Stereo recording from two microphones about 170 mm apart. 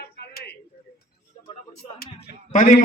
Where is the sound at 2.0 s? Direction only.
55° left (ahead or behind).